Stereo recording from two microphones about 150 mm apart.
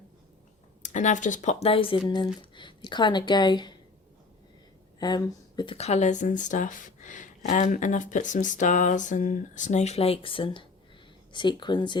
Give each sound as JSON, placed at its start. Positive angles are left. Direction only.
{"t": 0.8, "sound": "speech", "side_deg": 55}
{"t": 4.9, "sound": "speech", "side_deg": 30}